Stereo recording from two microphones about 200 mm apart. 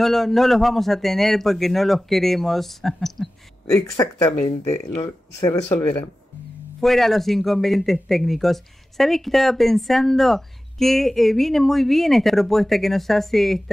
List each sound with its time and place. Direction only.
0.0 s a man's voice: centre (ahead or behind)
3.6 s speech: 15° left (ahead or behind)
6.8 s a man's voice: centre (ahead or behind)